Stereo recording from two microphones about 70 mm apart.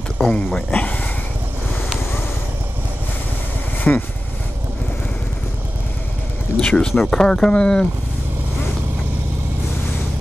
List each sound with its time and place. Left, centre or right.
0.2 s speech: centre
3.9 s speech: centre
6.6 s speech: centre